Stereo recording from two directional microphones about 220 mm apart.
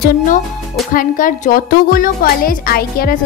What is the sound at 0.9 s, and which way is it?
A woman's voice, 40° left (ahead or behind).